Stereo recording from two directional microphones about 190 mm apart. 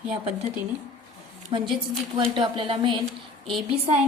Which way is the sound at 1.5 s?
30° right (ahead or behind).